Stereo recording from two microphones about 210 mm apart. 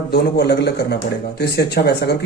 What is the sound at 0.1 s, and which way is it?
A man's voice, 50° left (ahead or behind).